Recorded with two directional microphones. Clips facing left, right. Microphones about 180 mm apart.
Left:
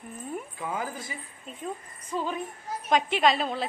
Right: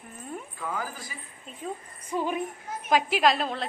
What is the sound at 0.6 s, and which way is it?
Speech, 20° left (ahead or behind).